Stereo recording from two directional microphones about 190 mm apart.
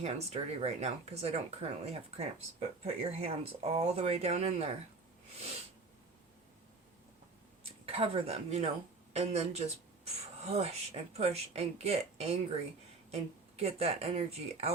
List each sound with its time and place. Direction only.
0.0 s speech: 35° right (ahead or behind)
7.6 s speech: 30° right (ahead or behind)